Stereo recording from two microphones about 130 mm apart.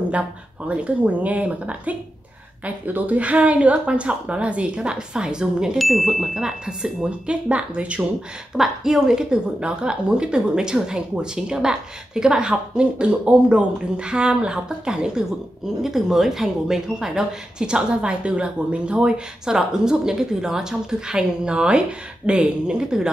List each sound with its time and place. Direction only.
0.7 s a woman's voice: 10° right (ahead or behind)